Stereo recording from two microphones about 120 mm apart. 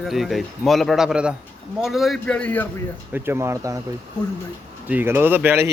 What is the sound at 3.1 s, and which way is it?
Speech, 20° right (ahead or behind).